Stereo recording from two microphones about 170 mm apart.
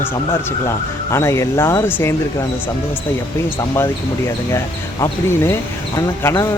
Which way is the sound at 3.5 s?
15° left (ahead or behind).